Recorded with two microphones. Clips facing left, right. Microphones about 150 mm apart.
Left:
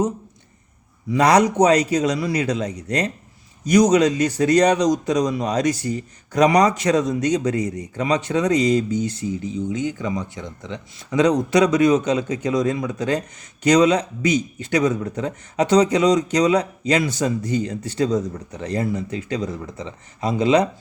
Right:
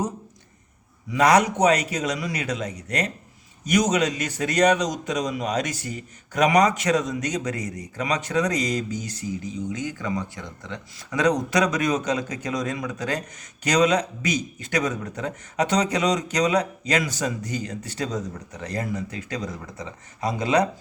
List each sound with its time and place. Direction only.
1.1 s speech: 35° left (ahead or behind)